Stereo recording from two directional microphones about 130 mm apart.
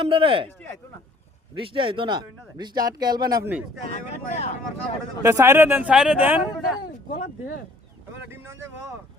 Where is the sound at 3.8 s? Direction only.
60° left (ahead or behind).